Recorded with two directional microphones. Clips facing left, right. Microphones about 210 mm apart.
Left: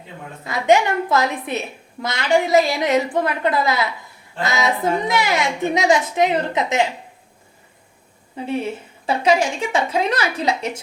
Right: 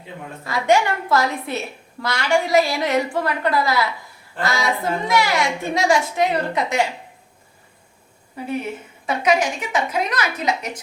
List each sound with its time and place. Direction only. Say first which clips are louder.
0.4 s a woman's voice: left 2 dB; 20° left (ahead or behind)
8.4 s a woman's voice: left 2 dB; 30° left (ahead or behind)